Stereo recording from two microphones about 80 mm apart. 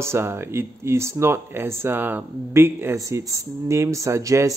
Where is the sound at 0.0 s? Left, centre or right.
Right.